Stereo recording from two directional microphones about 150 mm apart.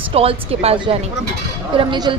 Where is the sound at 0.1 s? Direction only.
40° right (ahead or behind).